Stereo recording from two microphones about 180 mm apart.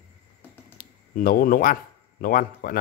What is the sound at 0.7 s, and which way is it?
Speech, 50° left (ahead or behind).